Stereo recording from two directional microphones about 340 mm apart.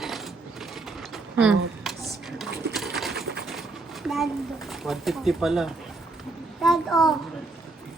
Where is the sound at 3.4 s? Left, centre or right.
Centre.